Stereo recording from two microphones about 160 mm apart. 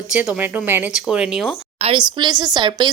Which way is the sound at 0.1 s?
10° right (ahead or behind).